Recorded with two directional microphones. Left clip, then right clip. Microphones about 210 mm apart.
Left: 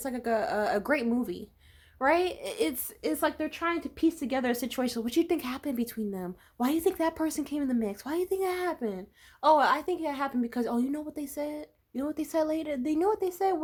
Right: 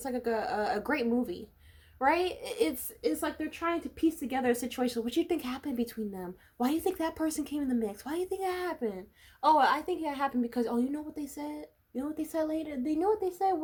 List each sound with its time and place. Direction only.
0.0 s a woman's voice: 25° left (ahead or behind)